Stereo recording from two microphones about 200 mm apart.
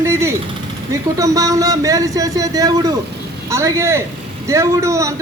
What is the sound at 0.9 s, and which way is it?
A man's voice, 15° right (ahead or behind).